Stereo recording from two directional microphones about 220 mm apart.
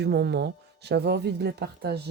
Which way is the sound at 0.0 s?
50° right (ahead or behind).